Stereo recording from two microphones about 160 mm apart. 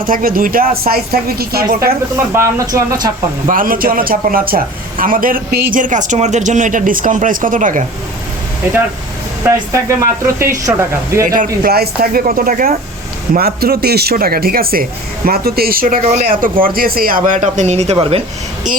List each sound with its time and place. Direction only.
0.0 s speech: 60° right (ahead or behind)
2.3 s speech: 20° right (ahead or behind)
3.4 s speech: 60° right (ahead or behind); by 5.8 s 80° right
5.8 s speech: 50° right (ahead or behind)
9.4 s speech: 15° right (ahead or behind)
11.3 s speech: 70° right (ahead or behind); by 17.9 s 45° right (ahead or behind)